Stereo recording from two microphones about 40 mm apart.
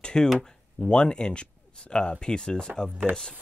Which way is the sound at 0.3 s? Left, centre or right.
Centre.